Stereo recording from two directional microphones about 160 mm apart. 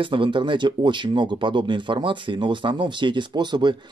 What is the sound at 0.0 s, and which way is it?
Speech, 30° right (ahead or behind).